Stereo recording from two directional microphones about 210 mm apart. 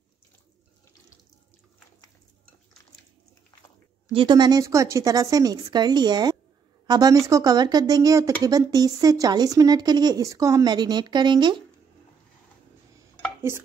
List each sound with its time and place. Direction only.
4.1 s speech: 25° right (ahead or behind)
13.4 s stir: 10° right (ahead or behind)